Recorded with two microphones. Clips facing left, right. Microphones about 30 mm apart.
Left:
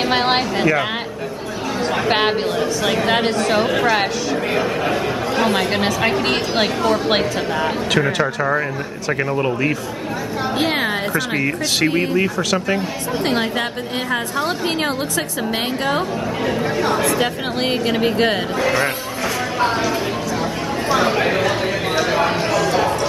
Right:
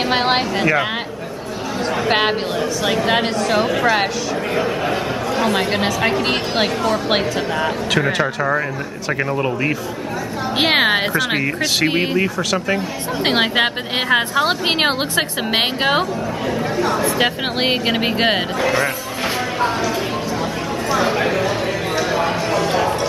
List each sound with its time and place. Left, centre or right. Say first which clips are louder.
0.0 s speech: even; centre
2.0 s speech: even; centre
10.6 s a woman's voice: right 6 dB; right
12.2 s speech: even; centre
13.2 s a woman's voice: right 5 dB; right
16.5 s speech: right 1 dB; centre
17.2 s speech: right 2 dB; right
18.6 s speech: left 2 dB; centre
20.9 s speech: left 1 dB; centre
21.5 s chatter: left 1 dB; centre